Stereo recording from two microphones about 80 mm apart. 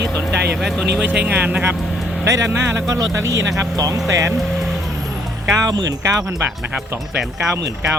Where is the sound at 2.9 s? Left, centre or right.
Right.